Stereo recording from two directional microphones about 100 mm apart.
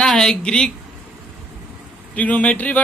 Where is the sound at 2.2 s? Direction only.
15° left (ahead or behind).